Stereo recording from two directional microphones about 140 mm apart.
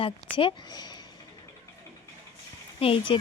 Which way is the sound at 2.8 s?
40° left (ahead or behind).